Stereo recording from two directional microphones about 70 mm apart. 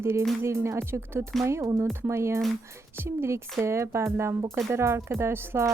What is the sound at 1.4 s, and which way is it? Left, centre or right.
Music, right.